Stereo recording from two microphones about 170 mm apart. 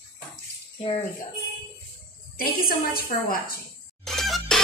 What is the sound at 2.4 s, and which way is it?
A woman's voice, 60° left (ahead or behind).